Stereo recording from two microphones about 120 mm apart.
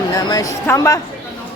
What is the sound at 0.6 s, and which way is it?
Speech, 25° left (ahead or behind).